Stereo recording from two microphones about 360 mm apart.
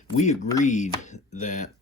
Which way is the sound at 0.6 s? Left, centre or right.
Centre.